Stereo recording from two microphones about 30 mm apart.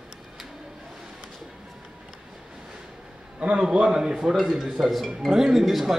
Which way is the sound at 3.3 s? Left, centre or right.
Right.